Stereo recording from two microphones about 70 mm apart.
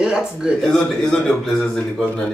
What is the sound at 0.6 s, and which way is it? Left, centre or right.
A man's voice, centre.